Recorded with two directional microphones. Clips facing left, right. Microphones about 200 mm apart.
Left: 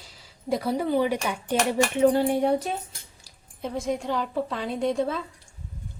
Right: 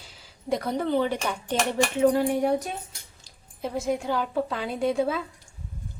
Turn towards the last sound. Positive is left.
turn(degrees=-5)  # may be behind; listen again after turning